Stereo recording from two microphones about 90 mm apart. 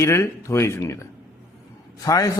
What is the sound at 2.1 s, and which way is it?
Speech, 40° left (ahead or behind).